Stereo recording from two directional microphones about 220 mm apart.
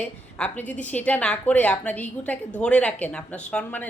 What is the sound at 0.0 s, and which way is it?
A woman's voice, 5° left (ahead or behind).